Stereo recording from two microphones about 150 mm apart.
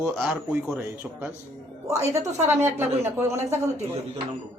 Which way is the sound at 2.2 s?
15° right (ahead or behind).